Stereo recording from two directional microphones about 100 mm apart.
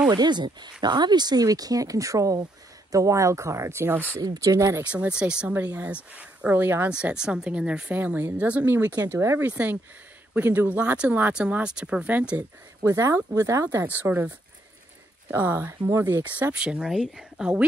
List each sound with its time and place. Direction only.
0.1 s speech: 45° right (ahead or behind); by 4.0 s 25° right (ahead or behind)
4.2 s speech: 40° right (ahead or behind)
4.9 s speech: 10° right (ahead or behind)
6.9 s speech: 10° right (ahead or behind)
9.1 s speech: 30° right (ahead or behind)
9.4 s speech: 15° right (ahead or behind)
12.4 s speech: 35° right (ahead or behind)
13.8 s speech: 20° right (ahead or behind)
15.3 s speech: 20° right (ahead or behind)